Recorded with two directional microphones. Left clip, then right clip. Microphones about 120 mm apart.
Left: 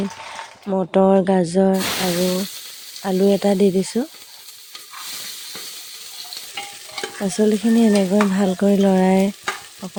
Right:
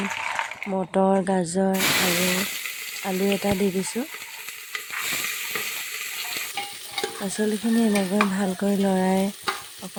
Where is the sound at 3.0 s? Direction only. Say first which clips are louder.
Left 7 dB; 15° left (ahead or behind).